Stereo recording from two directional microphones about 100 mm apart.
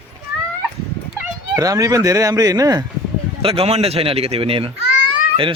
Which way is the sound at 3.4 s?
70° right (ahead or behind).